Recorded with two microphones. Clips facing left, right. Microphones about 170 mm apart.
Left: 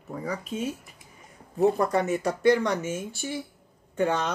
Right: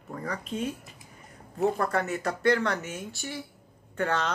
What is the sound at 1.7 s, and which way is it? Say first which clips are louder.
Speech: left 4 dB; 15° left (ahead or behind).